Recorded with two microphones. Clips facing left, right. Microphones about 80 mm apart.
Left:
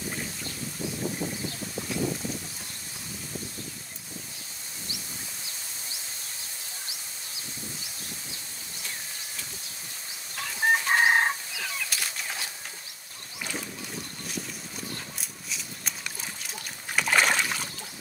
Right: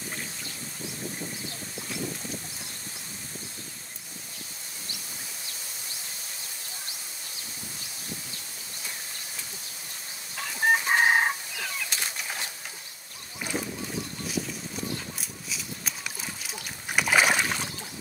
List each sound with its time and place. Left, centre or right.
10.3 s chicken: centre
11.9 s bird: right
15.1 s a sound: centre
16.9 s boat: centre